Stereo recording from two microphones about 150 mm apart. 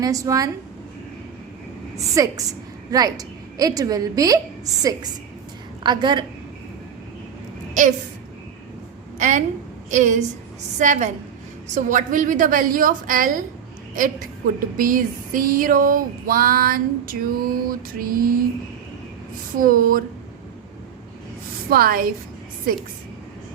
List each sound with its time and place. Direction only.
0.0 s a woman's voice: 25° right (ahead or behind)
2.0 s a woman's voice: 20° right (ahead or behind)
5.8 s a woman's voice: 30° right (ahead or behind)
7.7 s a woman's voice: 55° right (ahead or behind)
9.1 s a woman's voice: 55° right (ahead or behind); by 18.3 s 70° right (ahead or behind)
19.5 s speech: 70° right (ahead or behind)
21.7 s speech: 80° right